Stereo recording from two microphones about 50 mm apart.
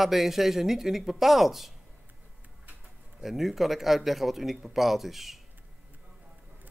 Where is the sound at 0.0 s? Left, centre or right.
Centre.